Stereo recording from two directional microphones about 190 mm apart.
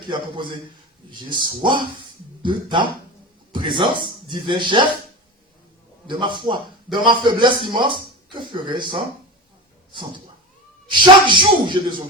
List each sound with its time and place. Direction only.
0.1 s a man's voice: 25° right (ahead or behind)
6.1 s a man's voice: 25° right (ahead or behind)
10.8 s a man's voice: 25° right (ahead or behind)